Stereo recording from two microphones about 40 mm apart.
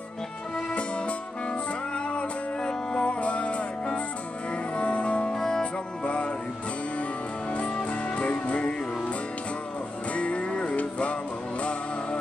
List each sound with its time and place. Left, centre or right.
0.7 s music: left
5.3 s music: centre
5.6 s music: left
7.5 s music: left
10.1 s music: left